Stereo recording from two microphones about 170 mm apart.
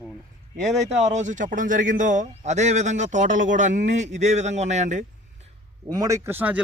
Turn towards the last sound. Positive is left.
turn(degrees=-10)  # may be behind; listen again after turning